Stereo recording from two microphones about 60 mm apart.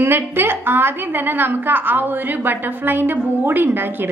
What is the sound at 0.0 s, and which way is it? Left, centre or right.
A woman's voice, right.